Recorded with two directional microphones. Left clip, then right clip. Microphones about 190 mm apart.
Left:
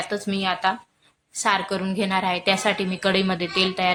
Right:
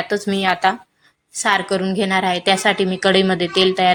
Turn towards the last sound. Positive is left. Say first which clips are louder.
# right 7 dB
turn(degrees=-15)  # may be behind; listen again after turning